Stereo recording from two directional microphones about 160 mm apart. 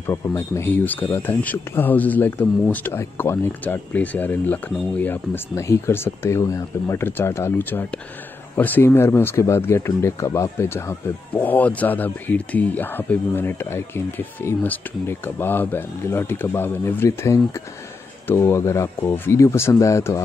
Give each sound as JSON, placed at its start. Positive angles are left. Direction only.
{"t": 0.4, "sound": "speech", "side_deg": 15}